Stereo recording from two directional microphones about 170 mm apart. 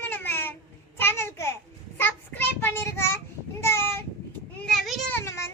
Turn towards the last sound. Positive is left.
turn(degrees=15)  # may be behind; listen again after turning